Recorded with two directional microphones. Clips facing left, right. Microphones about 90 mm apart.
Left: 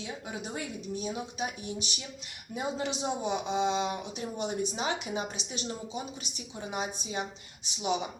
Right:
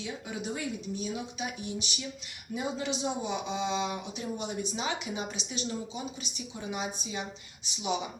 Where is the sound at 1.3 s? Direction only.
45° left (ahead or behind).